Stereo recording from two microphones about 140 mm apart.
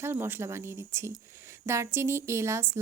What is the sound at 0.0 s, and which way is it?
Speech, 15° right (ahead or behind).